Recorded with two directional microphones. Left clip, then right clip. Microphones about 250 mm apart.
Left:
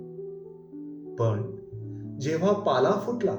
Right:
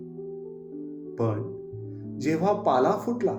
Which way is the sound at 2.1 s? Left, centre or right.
Right.